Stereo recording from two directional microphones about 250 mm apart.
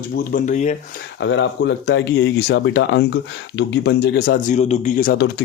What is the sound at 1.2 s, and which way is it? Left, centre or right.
A man's voice, left.